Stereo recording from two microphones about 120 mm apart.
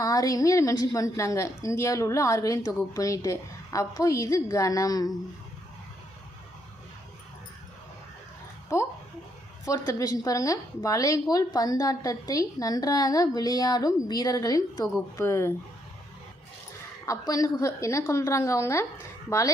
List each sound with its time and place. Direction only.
0.0 s a woman's voice: 30° left (ahead or behind)
8.7 s a child's voice: 25° left (ahead or behind)
17.1 s a woman's voice: 30° left (ahead or behind)